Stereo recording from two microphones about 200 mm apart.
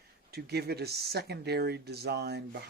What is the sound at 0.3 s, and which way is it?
Speech, 55° right (ahead or behind).